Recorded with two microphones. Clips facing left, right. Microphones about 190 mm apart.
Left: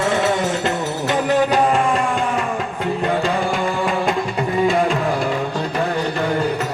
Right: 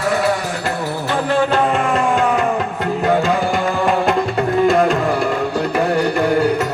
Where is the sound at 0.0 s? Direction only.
25° left (ahead or behind).